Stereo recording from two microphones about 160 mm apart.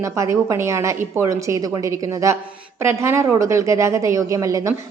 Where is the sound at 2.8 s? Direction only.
15° right (ahead or behind).